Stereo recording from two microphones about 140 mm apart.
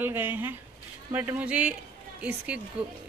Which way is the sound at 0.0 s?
15° right (ahead or behind).